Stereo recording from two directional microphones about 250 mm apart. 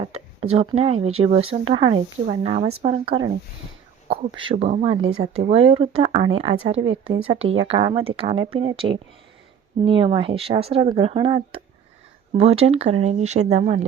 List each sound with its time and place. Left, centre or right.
0.0 s speech: right
4.4 s speech: right
6.8 s speech: right
7.6 s speech: centre